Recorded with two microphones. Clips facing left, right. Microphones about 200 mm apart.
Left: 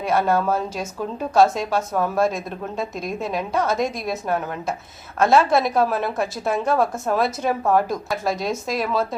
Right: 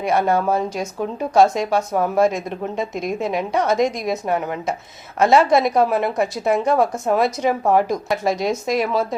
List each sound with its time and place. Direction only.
0.3 s speech: 15° right (ahead or behind)
5.2 s a woman's voice: 20° right (ahead or behind)